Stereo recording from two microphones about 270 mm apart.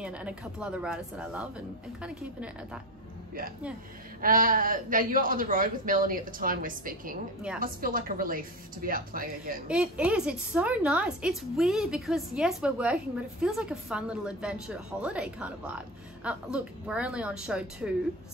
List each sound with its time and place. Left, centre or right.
0.0 s a woman's voice: centre
4.2 s a man's voice: right
9.7 s a woman's voice: centre